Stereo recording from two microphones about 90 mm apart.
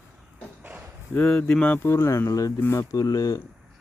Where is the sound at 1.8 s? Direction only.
30° left (ahead or behind).